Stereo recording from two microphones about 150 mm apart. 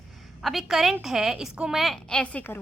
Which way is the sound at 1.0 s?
Centre (ahead or behind).